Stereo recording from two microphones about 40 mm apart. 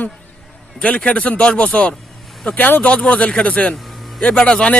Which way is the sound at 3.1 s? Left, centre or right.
Left.